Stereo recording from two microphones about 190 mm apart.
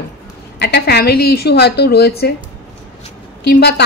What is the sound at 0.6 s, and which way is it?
A woman's voice, 60° left (ahead or behind).